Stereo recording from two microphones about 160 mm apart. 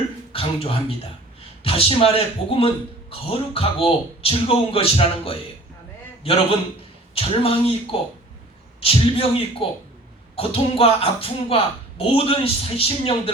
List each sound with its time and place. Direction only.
0.3 s speech: 35° left (ahead or behind)
7.1 s speech: 35° left (ahead or behind)
8.8 s speech: 35° left (ahead or behind)